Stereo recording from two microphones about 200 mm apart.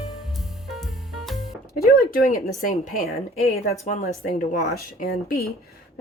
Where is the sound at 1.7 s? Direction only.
50° left (ahead or behind).